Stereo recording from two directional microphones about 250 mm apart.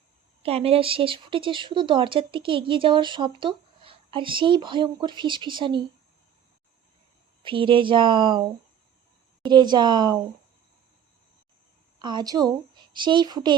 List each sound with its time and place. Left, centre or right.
0.4 s speech: right
7.4 s speech: centre
9.5 s speech: centre
11.9 s speech: centre